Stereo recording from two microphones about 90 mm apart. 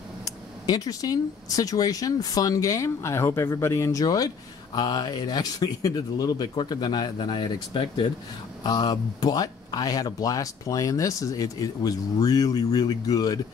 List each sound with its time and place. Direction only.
0.2 s speech: 45° left (ahead or behind); by 8.1 s 65° left (ahead or behind)
8.6 s speech: 50° left (ahead or behind)